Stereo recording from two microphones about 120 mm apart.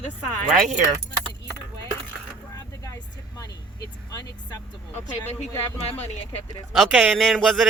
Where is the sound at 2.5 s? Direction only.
30° left (ahead or behind).